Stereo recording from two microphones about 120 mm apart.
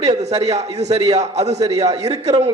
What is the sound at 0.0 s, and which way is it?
A man's voice, 60° right (ahead or behind).